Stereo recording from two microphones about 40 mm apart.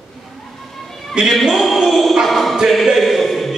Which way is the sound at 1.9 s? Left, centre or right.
Centre.